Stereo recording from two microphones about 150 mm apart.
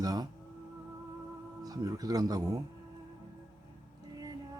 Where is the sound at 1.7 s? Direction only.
25° right (ahead or behind).